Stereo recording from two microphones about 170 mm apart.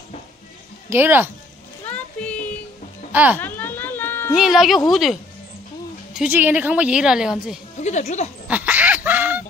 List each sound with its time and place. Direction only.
0.8 s speech: 10° right (ahead or behind)
1.9 s music: 5° left (ahead or behind)
3.1 s speech: 10° right (ahead or behind)
3.3 s a sound: 10° left (ahead or behind)
4.3 s a woman's voice: centre (ahead or behind)
7.8 s speech: 45° left (ahead or behind)
8.5 s snicker: 10° right (ahead or behind)